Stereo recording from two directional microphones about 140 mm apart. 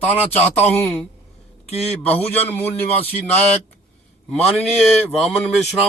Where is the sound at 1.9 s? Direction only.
10° left (ahead or behind).